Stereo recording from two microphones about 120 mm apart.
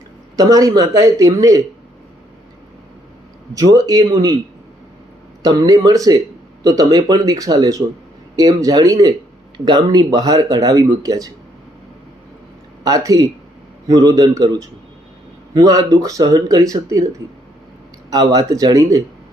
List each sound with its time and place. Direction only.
0.3 s speech: 30° right (ahead or behind)
3.5 s speech: 30° right (ahead or behind)
5.4 s speech: 30° right (ahead or behind)
12.8 s speech: 30° right (ahead or behind)
18.1 s speech: 35° right (ahead or behind)